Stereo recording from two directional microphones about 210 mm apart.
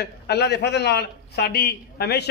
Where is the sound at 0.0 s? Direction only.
50° left (ahead or behind).